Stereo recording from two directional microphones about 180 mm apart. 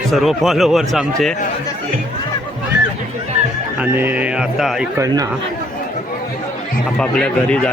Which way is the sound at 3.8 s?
10° right (ahead or behind).